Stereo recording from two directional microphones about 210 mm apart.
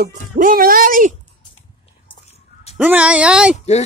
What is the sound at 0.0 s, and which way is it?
Speech, 40° right (ahead or behind).